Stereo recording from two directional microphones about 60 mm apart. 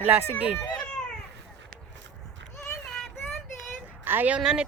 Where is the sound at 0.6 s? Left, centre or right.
Centre.